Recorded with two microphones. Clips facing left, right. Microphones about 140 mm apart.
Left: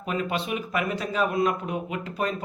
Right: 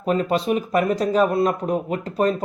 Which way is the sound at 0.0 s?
40° right (ahead or behind).